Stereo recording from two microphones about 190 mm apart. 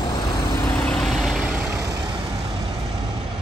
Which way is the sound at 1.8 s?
20° right (ahead or behind).